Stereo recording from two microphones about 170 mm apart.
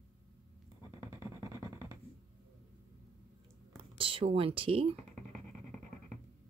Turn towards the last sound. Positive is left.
turn(degrees=-35)  # may be behind; listen again after turning